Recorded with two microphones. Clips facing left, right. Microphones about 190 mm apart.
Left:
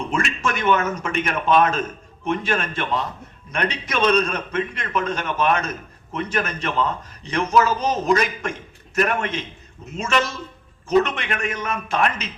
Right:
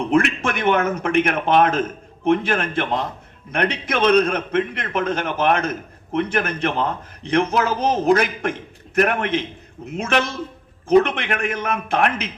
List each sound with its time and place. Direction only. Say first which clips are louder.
0.0 s a man's voice: right 6 dB; 60° right (ahead or behind)